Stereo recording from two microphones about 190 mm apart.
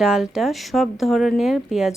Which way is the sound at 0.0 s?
5° right (ahead or behind).